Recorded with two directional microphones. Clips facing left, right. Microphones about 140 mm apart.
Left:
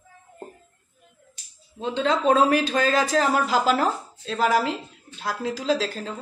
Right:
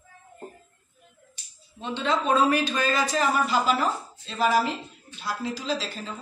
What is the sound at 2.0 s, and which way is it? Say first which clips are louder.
Speech: left 3 dB; 90° left.